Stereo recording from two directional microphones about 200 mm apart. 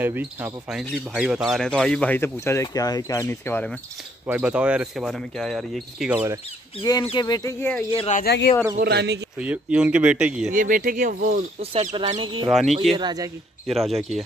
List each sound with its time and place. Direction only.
0.0 s speech: 10° right (ahead or behind); by 3.7 s 10° left (ahead or behind)
4.3 s speech: 5° right (ahead or behind)
6.8 s speech: 20° left (ahead or behind)
8.2 s speech: 50° left (ahead or behind)
8.7 s a man's voice: 50° right (ahead or behind)
9.4 s speech: 5° right (ahead or behind)
10.5 s speech: 40° right (ahead or behind)
12.0 s speech: 30° right (ahead or behind)
12.4 s speech: centre (ahead or behind)
12.9 s speech: 20° right (ahead or behind)
13.7 s speech: centre (ahead or behind)